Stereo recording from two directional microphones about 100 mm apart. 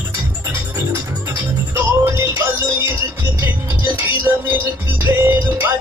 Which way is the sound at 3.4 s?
20° right (ahead or behind).